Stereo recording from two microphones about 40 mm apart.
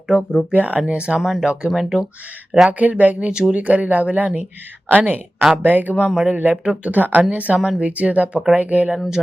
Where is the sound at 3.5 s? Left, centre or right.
Right.